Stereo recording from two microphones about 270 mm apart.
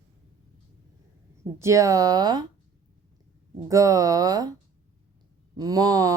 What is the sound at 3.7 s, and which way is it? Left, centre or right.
Speech, centre.